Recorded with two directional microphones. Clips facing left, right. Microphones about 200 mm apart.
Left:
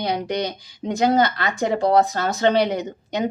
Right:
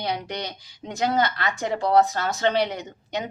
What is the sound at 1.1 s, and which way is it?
Speech, 40° left (ahead or behind).